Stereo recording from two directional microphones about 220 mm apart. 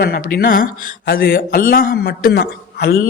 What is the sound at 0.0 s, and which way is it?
Speech, 45° left (ahead or behind).